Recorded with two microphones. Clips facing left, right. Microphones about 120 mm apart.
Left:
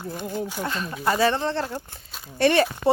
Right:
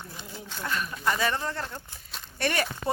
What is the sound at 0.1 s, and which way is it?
Speech, 50° left (ahead or behind).